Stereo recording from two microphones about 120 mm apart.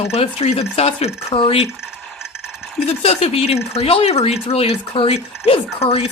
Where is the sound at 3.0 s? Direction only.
55° left (ahead or behind).